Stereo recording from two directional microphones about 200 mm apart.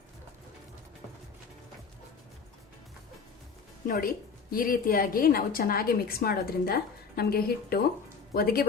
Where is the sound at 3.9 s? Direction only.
45° left (ahead or behind).